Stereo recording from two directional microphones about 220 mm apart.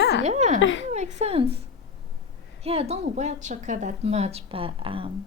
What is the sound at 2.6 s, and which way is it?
A woman's voice, 30° right (ahead or behind).